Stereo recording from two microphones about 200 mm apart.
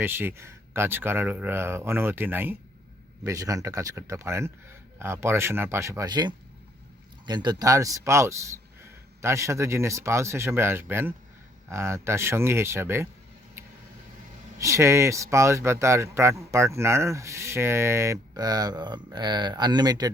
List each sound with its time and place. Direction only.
0.0 s speech: 10° right (ahead or behind)
14.6 s speech: 15° right (ahead or behind)